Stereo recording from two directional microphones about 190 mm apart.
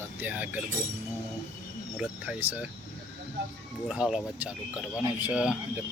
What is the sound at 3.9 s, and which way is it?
Speech, 5° right (ahead or behind).